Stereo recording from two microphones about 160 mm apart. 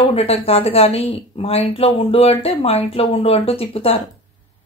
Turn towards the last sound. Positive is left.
turn(degrees=35)  # may be behind; listen again after turning